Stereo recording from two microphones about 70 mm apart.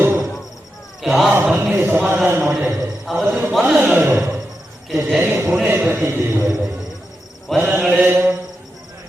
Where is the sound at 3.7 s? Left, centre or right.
Right.